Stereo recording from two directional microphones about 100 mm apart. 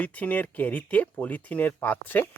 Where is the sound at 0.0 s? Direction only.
15° left (ahead or behind).